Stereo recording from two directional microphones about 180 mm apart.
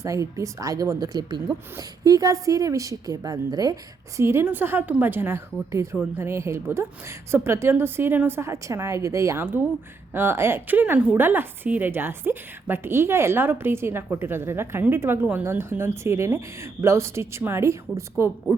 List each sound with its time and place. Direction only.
0.0 s a woman's voice: 15° right (ahead or behind)